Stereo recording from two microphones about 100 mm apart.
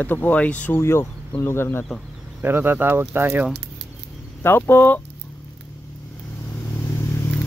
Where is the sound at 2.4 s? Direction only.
20° right (ahead or behind).